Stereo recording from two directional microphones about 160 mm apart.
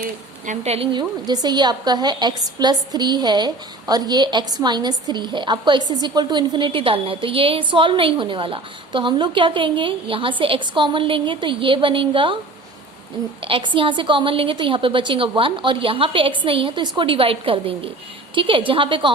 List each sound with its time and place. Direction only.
0.0 s a woman's voice: 50° right (ahead or behind)
0.9 s a woman's voice: 25° right (ahead or behind)
13.4 s a woman's voice: 30° right (ahead or behind)